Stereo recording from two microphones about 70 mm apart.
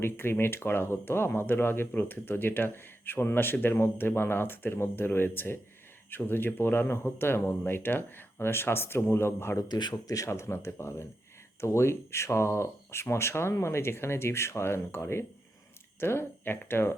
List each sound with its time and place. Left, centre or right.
0.0 s speech: left
9.6 s speech: left
10.2 s speech: left